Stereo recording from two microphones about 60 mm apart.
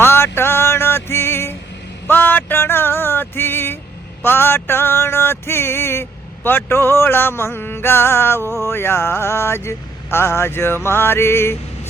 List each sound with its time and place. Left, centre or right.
0.0 s music: left
2.0 s a sound: left
8.6 s vehicle: left